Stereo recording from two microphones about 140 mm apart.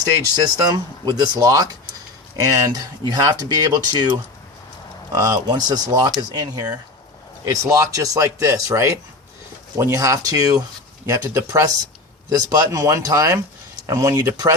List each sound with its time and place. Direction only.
0.4 s speech: 25° right (ahead or behind)
5.1 s speech: 25° right (ahead or behind)